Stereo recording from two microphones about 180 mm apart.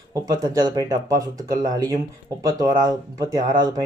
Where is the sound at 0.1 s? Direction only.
20° right (ahead or behind).